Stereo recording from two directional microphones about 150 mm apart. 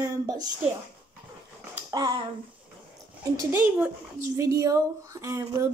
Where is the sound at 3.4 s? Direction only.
15° right (ahead or behind).